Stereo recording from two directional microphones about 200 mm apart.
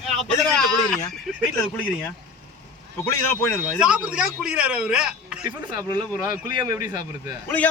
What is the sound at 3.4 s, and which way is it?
A man's voice, 5° right (ahead or behind).